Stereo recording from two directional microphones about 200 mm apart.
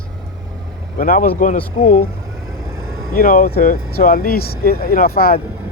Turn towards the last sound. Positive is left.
turn(degrees=50)  # may be behind; listen again after turning